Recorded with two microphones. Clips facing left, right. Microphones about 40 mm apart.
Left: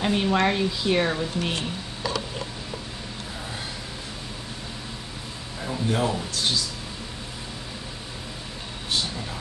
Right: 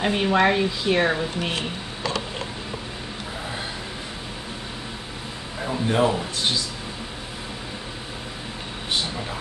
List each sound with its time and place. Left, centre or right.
0.0 s speech: centre
5.6 s speech: right